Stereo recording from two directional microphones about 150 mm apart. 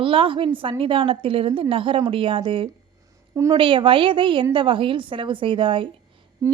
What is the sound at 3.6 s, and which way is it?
A woman's voice, 35° right (ahead or behind).